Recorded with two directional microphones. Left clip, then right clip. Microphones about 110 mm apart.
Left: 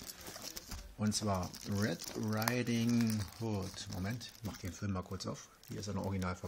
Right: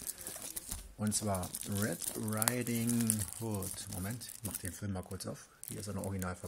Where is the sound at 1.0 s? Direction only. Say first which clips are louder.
Even; 10° left (ahead or behind).